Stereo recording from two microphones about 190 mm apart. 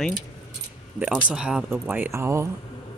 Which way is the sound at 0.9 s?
5° right (ahead or behind).